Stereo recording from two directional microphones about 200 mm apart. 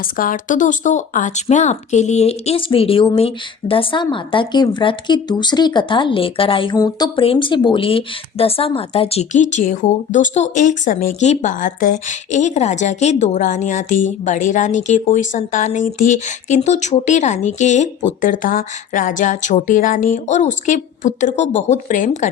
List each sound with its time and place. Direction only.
0.2 s speech: 40° left (ahead or behind)